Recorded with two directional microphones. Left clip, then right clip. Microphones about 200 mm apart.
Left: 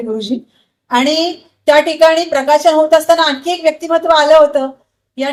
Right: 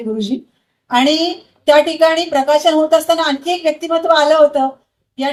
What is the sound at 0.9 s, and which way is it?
A woman's voice, 30° left (ahead or behind).